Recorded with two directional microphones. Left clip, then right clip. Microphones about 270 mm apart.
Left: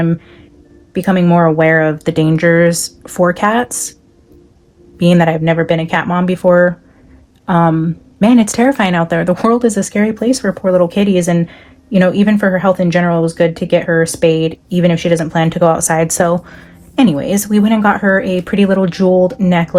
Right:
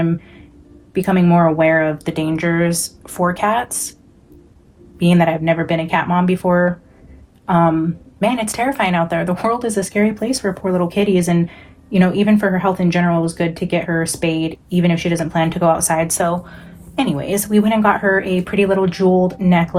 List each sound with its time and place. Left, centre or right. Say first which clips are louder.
0.9 s speech: left 3 dB; left
4.9 s speech: left 4 dB; left